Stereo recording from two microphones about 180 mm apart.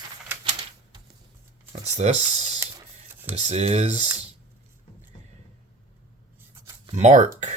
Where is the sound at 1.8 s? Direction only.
40° right (ahead or behind).